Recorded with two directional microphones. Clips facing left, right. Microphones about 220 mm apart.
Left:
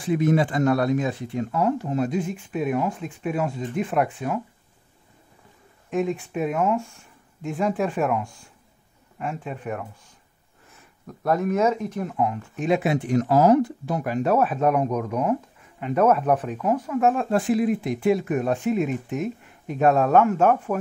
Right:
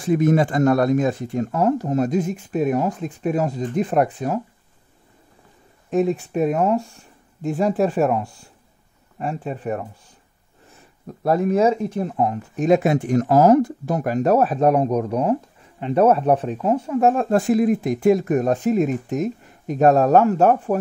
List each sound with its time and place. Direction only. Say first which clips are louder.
0.0 s speech: right 3 dB; 45° right (ahead or behind)
5.9 s speech: right 5 dB; 40° right (ahead or behind)